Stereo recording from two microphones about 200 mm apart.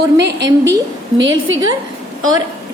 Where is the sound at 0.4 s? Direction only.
15° right (ahead or behind).